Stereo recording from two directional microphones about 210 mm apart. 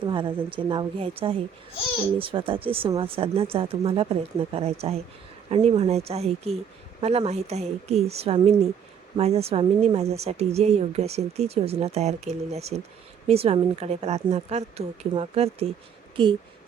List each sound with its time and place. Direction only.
0.0 s a woman's voice: 25° right (ahead or behind)